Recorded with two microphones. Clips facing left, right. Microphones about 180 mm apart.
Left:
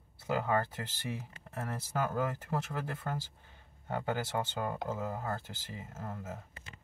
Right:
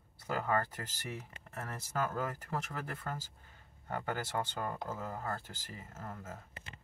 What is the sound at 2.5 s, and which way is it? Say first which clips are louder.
Speech: left 3 dB; 15° left (ahead or behind).